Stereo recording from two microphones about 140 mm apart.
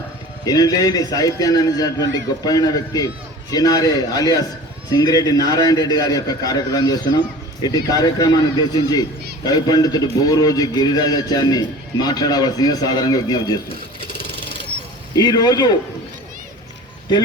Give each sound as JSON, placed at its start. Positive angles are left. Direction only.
{"t": 0.4, "sound": "speech", "side_deg": 25}
{"t": 14.1, "sound": "a sound", "side_deg": 40}
{"t": 15.1, "sound": "speech", "side_deg": 30}